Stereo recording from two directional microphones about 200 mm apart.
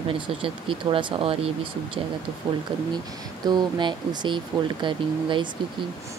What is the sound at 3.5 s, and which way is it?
Speech, 25° right (ahead or behind).